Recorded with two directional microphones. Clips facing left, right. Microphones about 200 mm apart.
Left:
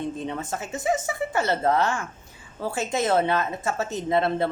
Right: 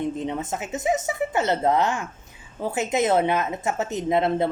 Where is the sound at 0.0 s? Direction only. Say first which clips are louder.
Right 3 dB; 20° right (ahead or behind).